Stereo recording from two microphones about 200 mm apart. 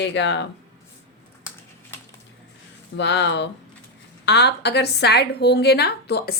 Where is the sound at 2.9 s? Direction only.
60° left (ahead or behind).